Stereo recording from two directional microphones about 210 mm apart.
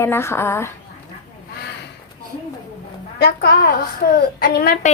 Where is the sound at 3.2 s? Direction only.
50° left (ahead or behind).